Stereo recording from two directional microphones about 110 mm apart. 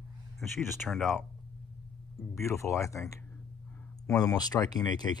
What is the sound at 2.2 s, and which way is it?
Speech, 25° left (ahead or behind).